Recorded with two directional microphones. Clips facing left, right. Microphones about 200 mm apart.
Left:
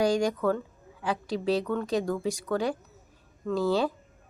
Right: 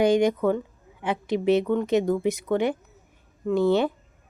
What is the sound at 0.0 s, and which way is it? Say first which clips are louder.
A woman's voice: right 5 dB; 20° right (ahead or behind).